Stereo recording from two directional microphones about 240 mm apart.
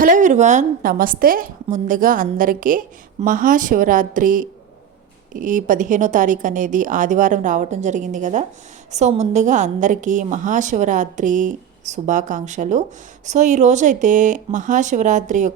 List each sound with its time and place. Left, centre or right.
0.0 s a woman's voice: right